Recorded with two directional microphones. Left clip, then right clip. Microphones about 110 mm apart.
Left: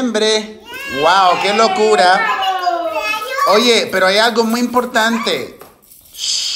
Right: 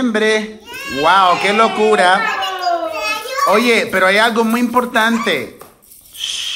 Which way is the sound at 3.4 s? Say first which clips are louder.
Left 1 dB; 40° left (ahead or behind).